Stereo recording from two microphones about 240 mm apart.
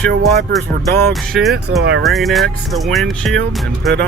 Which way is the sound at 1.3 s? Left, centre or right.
Centre.